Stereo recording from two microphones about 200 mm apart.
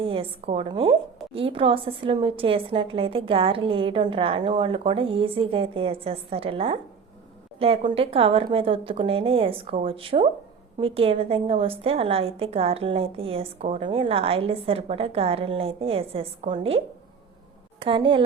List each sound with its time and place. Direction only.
0.0 s a woman's voice: 25° right (ahead or behind)